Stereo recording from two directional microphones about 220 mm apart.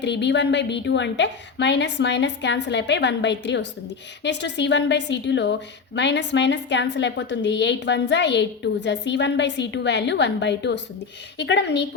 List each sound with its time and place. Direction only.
0.0 s a woman's voice: 50° left (ahead or behind)